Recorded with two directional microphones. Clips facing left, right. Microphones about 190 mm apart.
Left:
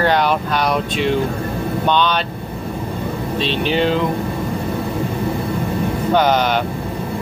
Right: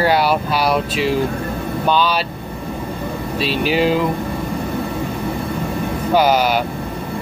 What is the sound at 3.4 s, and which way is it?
Speech, 5° right (ahead or behind).